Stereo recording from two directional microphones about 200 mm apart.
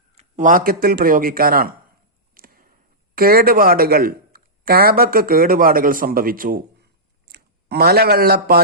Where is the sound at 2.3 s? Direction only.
45° right (ahead or behind).